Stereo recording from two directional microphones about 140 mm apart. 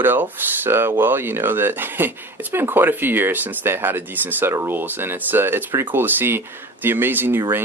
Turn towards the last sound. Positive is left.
turn(degrees=-15)  # may be behind; listen again after turning